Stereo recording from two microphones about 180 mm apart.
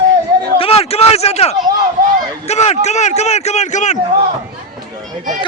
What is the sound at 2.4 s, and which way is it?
A man's voice, 35° left (ahead or behind).